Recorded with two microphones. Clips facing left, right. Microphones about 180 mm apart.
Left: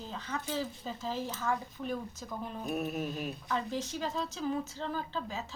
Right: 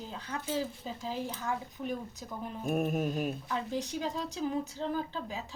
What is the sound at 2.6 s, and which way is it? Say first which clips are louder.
Speech: right 5 dB; 50° right (ahead or behind).